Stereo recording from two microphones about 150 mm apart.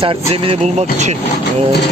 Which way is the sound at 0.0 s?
40° right (ahead or behind).